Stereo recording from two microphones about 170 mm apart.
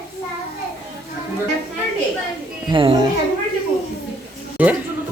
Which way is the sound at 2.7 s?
30° right (ahead or behind).